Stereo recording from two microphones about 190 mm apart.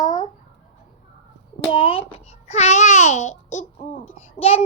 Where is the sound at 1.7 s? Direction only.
30° left (ahead or behind).